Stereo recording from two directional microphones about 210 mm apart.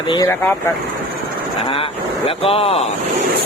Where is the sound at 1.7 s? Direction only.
25° left (ahead or behind).